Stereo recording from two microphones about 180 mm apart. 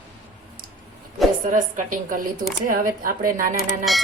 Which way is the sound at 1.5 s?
45° right (ahead or behind).